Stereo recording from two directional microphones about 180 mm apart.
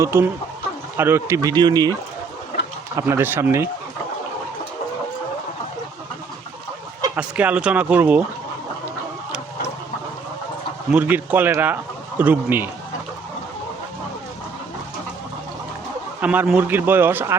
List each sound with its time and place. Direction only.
0.0 s speech: 15° right (ahead or behind)
7.2 s speech: 5° right (ahead or behind)
10.9 s speech: 10° right (ahead or behind)
16.2 s speech: 10° right (ahead or behind)